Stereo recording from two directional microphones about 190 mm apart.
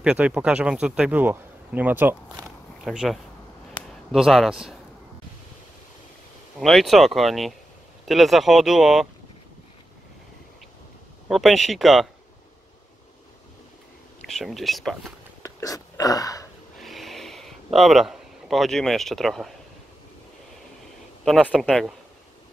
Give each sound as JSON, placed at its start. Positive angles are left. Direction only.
{"t": 0.0, "sound": "speech", "side_deg": -5}
{"t": 6.6, "sound": "speech", "side_deg": 0}
{"t": 11.2, "sound": "speech", "side_deg": 0}
{"t": 14.2, "sound": "speech", "side_deg": 0}
{"t": 15.4, "sound": "speech", "side_deg": 20}
{"t": 16.8, "sound": "a sound", "side_deg": 0}
{"t": 21.2, "sound": "speech", "side_deg": 0}